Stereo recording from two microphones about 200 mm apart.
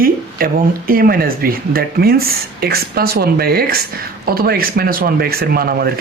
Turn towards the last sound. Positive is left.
turn(degrees=-50)  # may be behind; listen again after turning